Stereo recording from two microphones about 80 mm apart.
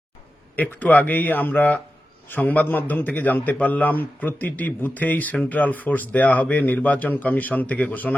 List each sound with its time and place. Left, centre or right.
0.5 s a man's voice: left